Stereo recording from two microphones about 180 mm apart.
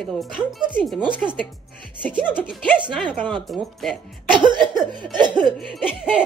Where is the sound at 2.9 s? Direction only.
5° left (ahead or behind).